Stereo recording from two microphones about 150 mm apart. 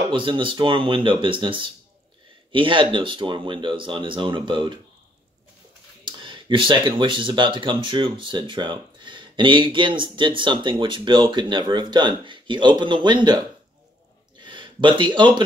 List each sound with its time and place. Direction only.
0.1 s speech: 35° right (ahead or behind)
6.0 s speech: 35° right (ahead or behind)